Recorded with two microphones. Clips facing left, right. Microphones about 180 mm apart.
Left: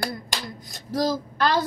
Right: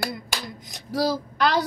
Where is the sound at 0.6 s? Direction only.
15° right (ahead or behind).